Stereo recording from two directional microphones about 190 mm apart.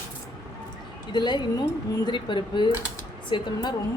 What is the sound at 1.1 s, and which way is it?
Speech, 25° left (ahead or behind).